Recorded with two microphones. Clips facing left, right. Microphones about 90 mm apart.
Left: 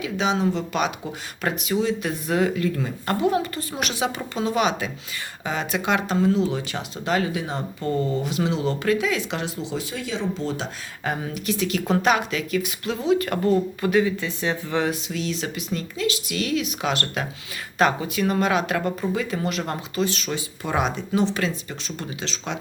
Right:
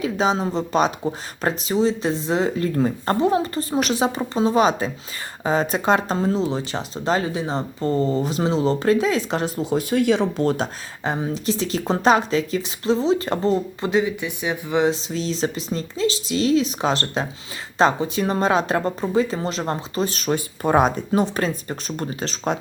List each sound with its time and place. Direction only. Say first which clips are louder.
0.0 s speech: right 2 dB; 35° right (ahead or behind); by 10.7 s 55° right (ahead or behind)
11.0 s speech: right 4 dB; 25° right (ahead or behind)
15.0 s speech: right 4 dB; 30° right (ahead or behind)
20.1 s speech: right 4 dB; 45° right (ahead or behind)